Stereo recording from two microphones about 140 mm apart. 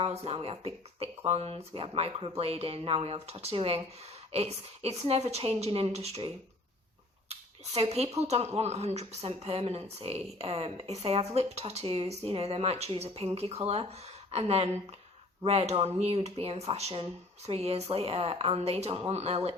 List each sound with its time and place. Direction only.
0.0 s speech: 45° right (ahead or behind)